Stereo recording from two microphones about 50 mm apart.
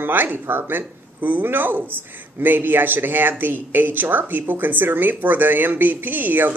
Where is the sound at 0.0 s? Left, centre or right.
Right.